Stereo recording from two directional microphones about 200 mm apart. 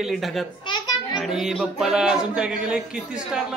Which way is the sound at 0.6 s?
20° left (ahead or behind).